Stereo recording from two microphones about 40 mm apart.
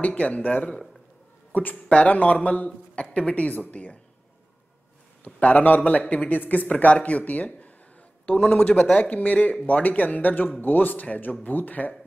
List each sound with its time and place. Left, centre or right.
0.0 s speech: left
1.5 s speech: left
1.9 s speech: left
5.2 s speech: left
6.7 s speech: left
9.1 s speech: left